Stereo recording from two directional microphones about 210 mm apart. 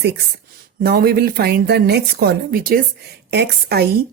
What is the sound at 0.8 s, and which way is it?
A woman's voice, 50° right (ahead or behind).